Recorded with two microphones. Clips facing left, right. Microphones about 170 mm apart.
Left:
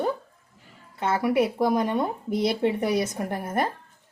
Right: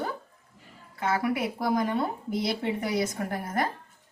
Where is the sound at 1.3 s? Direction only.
20° left (ahead or behind).